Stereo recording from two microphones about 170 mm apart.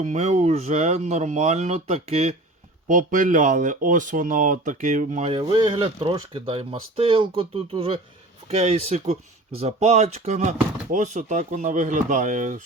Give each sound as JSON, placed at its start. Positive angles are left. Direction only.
{"t": 0.0, "sound": "speech", "side_deg": -45}
{"t": 2.8, "sound": "speech", "side_deg": -50}
{"t": 5.3, "sound": "speech", "side_deg": -25}